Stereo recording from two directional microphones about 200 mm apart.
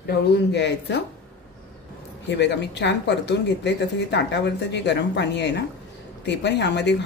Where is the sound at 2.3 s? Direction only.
60° left (ahead or behind).